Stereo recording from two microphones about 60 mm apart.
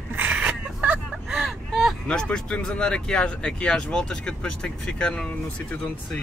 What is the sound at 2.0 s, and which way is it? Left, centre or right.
Speech, centre.